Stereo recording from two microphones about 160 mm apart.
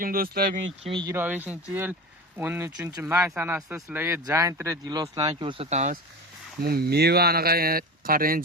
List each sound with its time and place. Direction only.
0.0 s speech: 65° right (ahead or behind)
0.9 s speech: 30° right (ahead or behind)
1.1 s speech: 10° right (ahead or behind); by 6.0 s 45° right (ahead or behind)
6.6 s speech: 75° right (ahead or behind)